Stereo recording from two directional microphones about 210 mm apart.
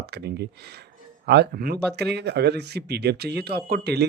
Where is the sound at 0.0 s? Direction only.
50° right (ahead or behind).